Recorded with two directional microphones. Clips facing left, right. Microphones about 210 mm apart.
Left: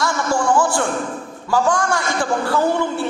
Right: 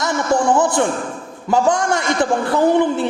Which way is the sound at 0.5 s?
20° right (ahead or behind).